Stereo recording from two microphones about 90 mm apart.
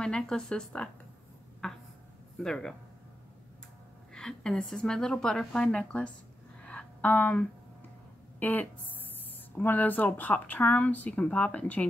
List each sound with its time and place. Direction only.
0.0 s speech: 10° left (ahead or behind)
1.6 s a sound: 5° left (ahead or behind)
2.4 s speech: 5° left (ahead or behind)
4.1 s speech: 10° left (ahead or behind)
6.6 s a sound: 15° left (ahead or behind)
8.4 s speech: 20° left (ahead or behind)